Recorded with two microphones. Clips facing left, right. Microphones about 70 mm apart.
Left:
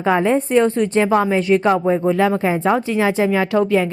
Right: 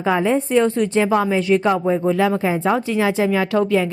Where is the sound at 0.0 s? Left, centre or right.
Left.